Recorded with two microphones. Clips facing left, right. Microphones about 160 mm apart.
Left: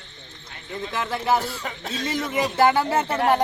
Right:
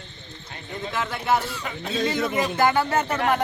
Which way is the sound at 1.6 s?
40° left (ahead or behind).